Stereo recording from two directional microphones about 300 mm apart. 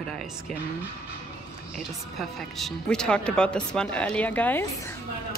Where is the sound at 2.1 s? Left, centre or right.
Centre.